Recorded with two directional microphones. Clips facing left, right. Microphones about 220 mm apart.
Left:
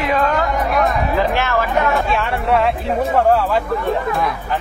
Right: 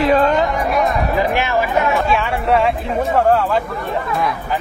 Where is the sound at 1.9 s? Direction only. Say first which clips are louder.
Right 1 dB; centre (ahead or behind).